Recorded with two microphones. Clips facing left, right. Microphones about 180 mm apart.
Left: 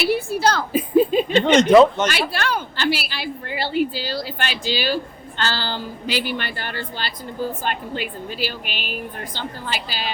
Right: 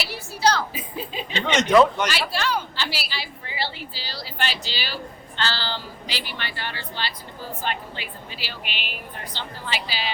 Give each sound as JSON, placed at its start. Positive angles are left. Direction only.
{"t": 0.0, "sound": "a woman's voice", "side_deg": 55}
{"t": 1.7, "sound": "speech", "side_deg": 25}
{"t": 2.3, "sound": "a woman's voice", "side_deg": 55}